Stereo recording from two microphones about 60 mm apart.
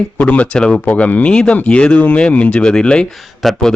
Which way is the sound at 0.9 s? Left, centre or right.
Left.